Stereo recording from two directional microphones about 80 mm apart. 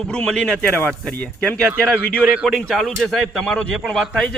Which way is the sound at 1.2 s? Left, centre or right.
Left.